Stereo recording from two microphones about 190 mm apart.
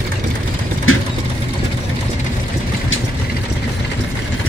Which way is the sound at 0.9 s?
90° left.